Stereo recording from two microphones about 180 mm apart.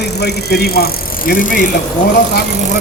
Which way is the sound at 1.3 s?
50° left (ahead or behind).